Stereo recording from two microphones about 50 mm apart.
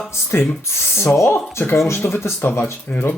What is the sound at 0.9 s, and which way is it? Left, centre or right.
Speech, left.